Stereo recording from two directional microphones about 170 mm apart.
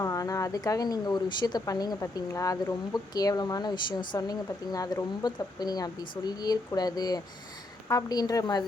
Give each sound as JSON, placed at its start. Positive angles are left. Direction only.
{"t": 0.0, "sound": "speech", "side_deg": 20}